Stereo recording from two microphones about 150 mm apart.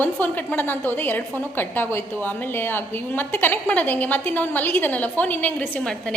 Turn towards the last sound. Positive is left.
turn(degrees=10)  # may be behind; listen again after turning